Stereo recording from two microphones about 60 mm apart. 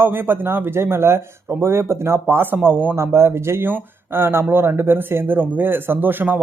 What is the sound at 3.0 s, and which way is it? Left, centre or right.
Speech, right.